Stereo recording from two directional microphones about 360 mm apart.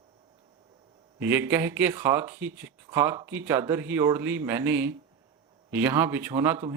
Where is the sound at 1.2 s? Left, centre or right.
Centre.